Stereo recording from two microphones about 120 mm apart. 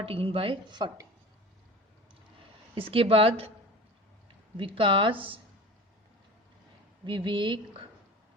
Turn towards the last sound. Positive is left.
turn(degrees=-45)  # may be behind; listen again after turning